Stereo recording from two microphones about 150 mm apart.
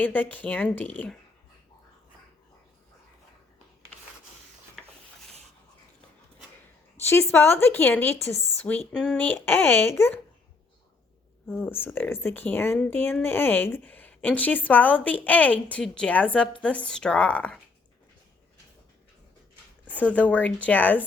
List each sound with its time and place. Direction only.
0.0 s a woman's voice: 10° left (ahead or behind)
7.0 s a woman's voice: 15° left (ahead or behind)
11.6 s a woman's voice: 15° left (ahead or behind)
19.9 s a woman's voice: 10° left (ahead or behind)